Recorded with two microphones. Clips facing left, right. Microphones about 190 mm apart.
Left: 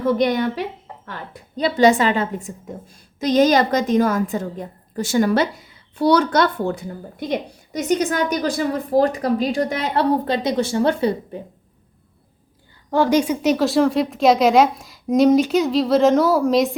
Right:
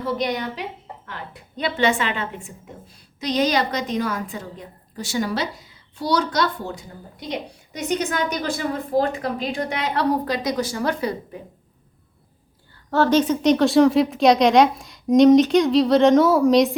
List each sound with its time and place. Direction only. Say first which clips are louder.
0.2 s a woman's voice: left 6 dB; 50° left (ahead or behind)
1.0 s a woman's voice: left 4 dB; 40° left (ahead or behind); by 7.3 s 55° left (ahead or behind)
8.4 s a woman's voice: left 4 dB; 45° left (ahead or behind); by 11.3 s 30° left (ahead or behind)
12.9 s a woman's voice: left 1 dB; 15° left (ahead or behind)